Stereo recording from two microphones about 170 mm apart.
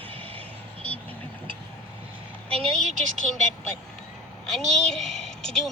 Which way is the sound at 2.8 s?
45° right (ahead or behind).